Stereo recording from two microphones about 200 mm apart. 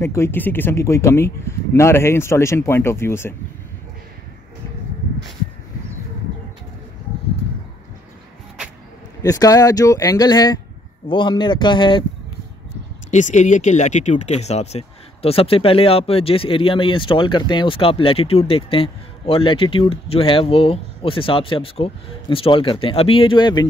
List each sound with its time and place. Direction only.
0.0 s speech: 15° left (ahead or behind)
9.2 s speech: 15° left (ahead or behind)
13.1 s speech: 35° left (ahead or behind); by 23.7 s 20° left (ahead or behind)